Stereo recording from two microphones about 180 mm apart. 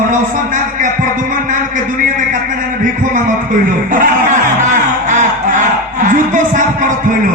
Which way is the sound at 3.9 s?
45° right (ahead or behind).